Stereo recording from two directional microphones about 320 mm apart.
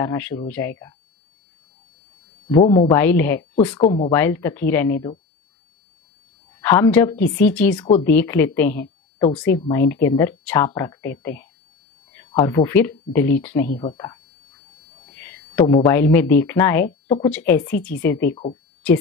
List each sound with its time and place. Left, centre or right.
0.0 s speech: centre
2.5 s speech: centre
6.6 s speech: centre
13.7 s speech: centre